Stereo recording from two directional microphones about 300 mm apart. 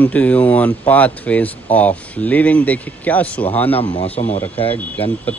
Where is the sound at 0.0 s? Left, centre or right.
Centre.